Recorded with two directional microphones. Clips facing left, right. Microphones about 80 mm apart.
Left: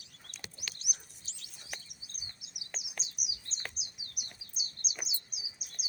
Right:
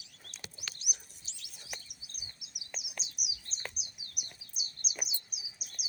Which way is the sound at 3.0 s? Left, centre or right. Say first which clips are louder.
Right 1 dB; left.